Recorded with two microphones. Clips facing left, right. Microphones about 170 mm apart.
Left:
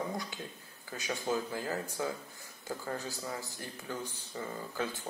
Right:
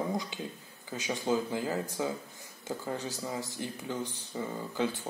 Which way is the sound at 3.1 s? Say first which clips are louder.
Right 3 dB; 20° right (ahead or behind).